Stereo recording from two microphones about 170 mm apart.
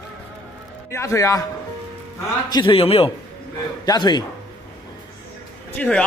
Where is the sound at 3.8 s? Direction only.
25° left (ahead or behind).